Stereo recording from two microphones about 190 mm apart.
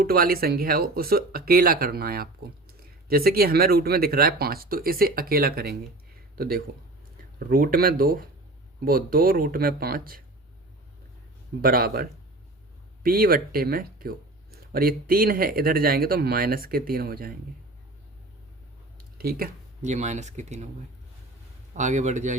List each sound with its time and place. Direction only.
0.0 s speech: 50° right (ahead or behind)
11.6 s speech: 50° right (ahead or behind)
19.1 s speech: 50° right (ahead or behind)
19.8 s speech: 40° right (ahead or behind)
21.8 s speech: 40° right (ahead or behind)